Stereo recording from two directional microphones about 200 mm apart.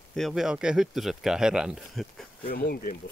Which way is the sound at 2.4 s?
50° left (ahead or behind).